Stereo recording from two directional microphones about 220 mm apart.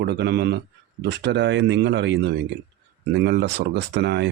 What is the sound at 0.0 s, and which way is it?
Speech, 50° right (ahead or behind).